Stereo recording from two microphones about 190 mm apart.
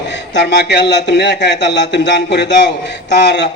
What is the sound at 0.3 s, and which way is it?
Speech, 60° left (ahead or behind).